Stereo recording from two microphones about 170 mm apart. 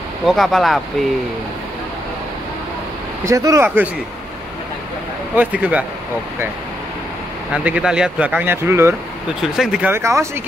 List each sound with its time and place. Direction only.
0.3 s speech: centre (ahead or behind)
3.3 s speech: 20° right (ahead or behind)
5.3 s speech: 10° right (ahead or behind)
7.5 s speech: 5° right (ahead or behind)
9.4 s speech: 5° right (ahead or behind)